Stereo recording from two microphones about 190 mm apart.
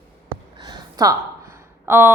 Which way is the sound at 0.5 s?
20° right (ahead or behind).